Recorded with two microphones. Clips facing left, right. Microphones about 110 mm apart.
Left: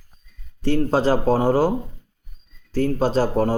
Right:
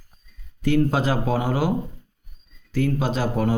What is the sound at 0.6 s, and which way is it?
Speech, 35° left (ahead or behind).